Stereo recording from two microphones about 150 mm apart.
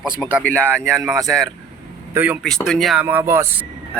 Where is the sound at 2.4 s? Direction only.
5° left (ahead or behind).